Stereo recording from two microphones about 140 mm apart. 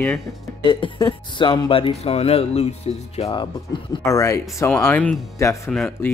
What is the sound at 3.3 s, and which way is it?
Speech, 35° left (ahead or behind).